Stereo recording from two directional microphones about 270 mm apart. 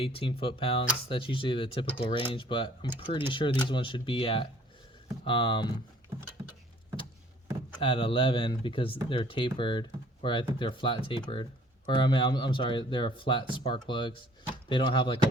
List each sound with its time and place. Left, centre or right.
0.0 s speech: centre
7.8 s speech: centre